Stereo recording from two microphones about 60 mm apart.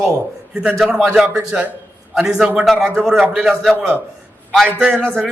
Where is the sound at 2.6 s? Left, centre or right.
Centre.